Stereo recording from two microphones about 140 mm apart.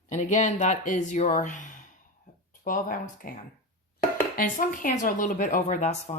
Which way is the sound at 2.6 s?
75° left (ahead or behind).